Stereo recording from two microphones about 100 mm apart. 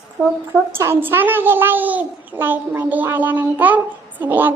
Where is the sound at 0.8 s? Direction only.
25° right (ahead or behind).